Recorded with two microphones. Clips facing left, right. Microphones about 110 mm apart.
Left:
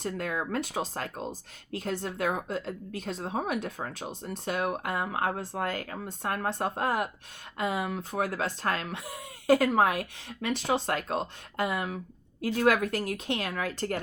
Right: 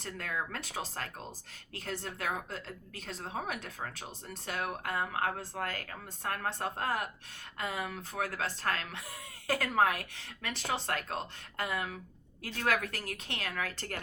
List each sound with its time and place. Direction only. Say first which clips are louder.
0.0 s a woman's voice: left 6 dB; 20° left (ahead or behind)